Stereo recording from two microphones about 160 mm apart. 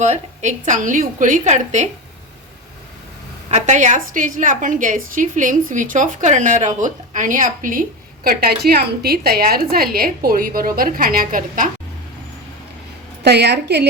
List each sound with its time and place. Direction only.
0.0 s a woman's voice: 45° right (ahead or behind)
3.5 s a woman's voice: 50° right (ahead or behind)
13.2 s a woman's voice: 90° right